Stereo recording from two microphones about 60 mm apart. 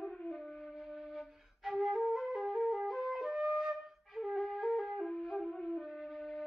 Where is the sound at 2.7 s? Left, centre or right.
Centre.